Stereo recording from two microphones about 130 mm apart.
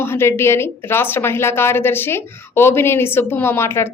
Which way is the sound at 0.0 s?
20° left (ahead or behind).